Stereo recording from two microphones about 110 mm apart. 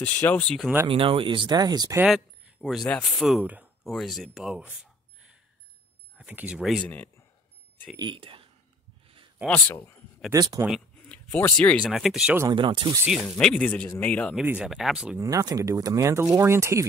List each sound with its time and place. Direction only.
0.0 s speech: 15° left (ahead or behind)
0.8 s speech: 55° right (ahead or behind); by 2.0 s 35° right (ahead or behind)
2.0 s a sound: 5° right (ahead or behind)
2.9 s speech: centre (ahead or behind)
6.8 s speech: 15° left (ahead or behind)
8.0 s speech: 50° right (ahead or behind)
9.0 s a sound: 55° right (ahead or behind)
9.5 s speech: 20° left (ahead or behind)
10.3 s speech: 35° right (ahead or behind)
11.1 s speech: 15° left (ahead or behind)
12.4 s speech: 50° right (ahead or behind)
13.1 s speech: centre (ahead or behind)
14.3 s speech: 10° right (ahead or behind)
15.1 s speech: 30° right (ahead or behind)